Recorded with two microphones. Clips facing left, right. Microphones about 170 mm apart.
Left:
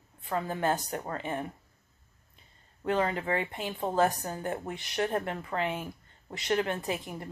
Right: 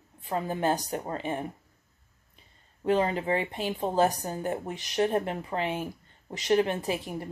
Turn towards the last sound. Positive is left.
turn(degrees=-15)  # may be behind; listen again after turning